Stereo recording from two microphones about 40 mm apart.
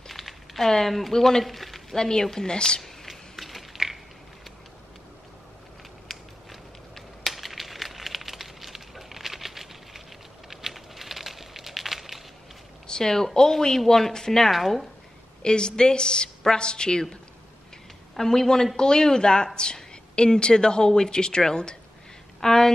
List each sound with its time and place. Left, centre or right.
0.0 s a sound: centre
0.7 s speech: centre
1.4 s a sound: centre
2.0 s a woman's voice: centre
2.8 s typing: centre
6.1 s a sound: centre
12.8 s speech: centre
14.5 s speech: centre
15.4 s a woman's voice: left
18.1 s a woman's voice: centre